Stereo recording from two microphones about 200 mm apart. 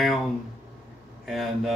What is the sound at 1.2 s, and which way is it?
Speech, centre (ahead or behind).